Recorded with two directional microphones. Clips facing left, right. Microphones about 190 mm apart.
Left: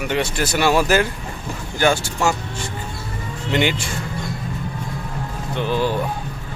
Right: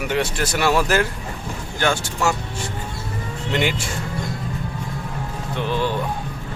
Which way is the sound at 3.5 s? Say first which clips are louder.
Left 2 dB; centre (ahead or behind).